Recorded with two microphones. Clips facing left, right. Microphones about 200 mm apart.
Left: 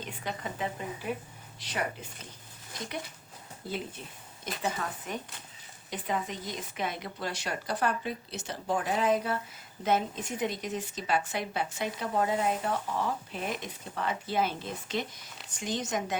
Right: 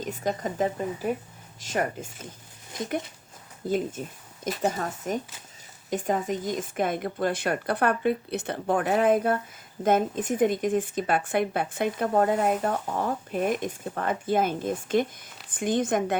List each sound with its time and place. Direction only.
0.0 s speech: 45° right (ahead or behind)
3.7 s speech: 45° right (ahead or behind)